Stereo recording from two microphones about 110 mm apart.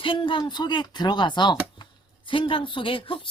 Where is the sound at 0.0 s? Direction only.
50° left (ahead or behind).